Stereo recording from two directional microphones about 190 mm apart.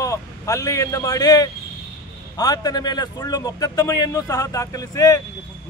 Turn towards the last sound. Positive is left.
turn(degrees=20)  # may be behind; listen again after turning